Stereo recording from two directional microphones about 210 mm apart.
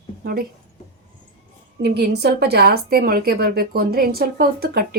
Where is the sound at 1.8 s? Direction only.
50° right (ahead or behind).